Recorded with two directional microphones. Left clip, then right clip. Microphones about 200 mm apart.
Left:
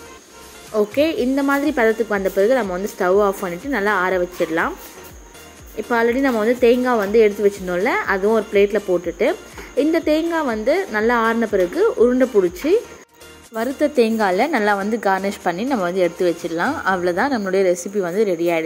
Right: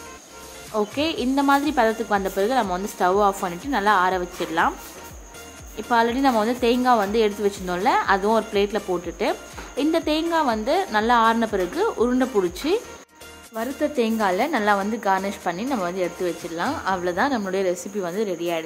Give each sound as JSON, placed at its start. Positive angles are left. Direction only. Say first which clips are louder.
{"t": 1.4, "sound": "a woman's voice", "louder": "even", "side_deg": 0}
{"t": 5.9, "sound": "a woman's voice", "louder": "left 2 dB", "side_deg": 0}
{"t": 13.6, "sound": "a woman's voice", "louder": "left 6 dB", "side_deg": 20}